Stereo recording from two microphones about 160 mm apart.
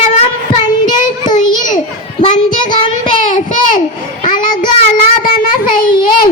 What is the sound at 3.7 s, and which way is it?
A child's voice, 55° left (ahead or behind).